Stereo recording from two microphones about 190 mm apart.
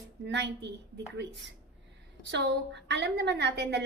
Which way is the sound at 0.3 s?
65° right (ahead or behind).